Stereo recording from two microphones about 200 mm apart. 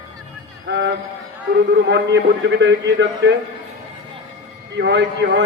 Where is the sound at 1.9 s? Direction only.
60° right (ahead or behind).